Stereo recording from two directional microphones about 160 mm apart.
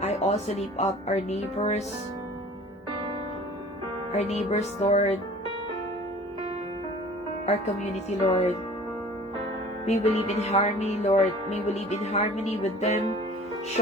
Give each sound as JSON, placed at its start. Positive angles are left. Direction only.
{"t": 0.0, "sound": "speech", "side_deg": 45}
{"t": 4.1, "sound": "music", "side_deg": 40}
{"t": 8.3, "sound": "music", "side_deg": 40}
{"t": 9.8, "sound": "speech", "side_deg": 40}